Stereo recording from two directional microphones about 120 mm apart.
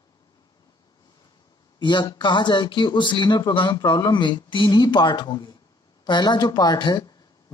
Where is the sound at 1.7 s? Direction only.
40° left (ahead or behind).